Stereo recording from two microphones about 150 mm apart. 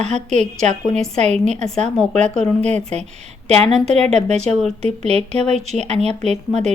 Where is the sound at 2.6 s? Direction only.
45° right (ahead or behind).